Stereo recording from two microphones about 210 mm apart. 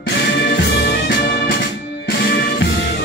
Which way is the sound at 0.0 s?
50° left (ahead or behind).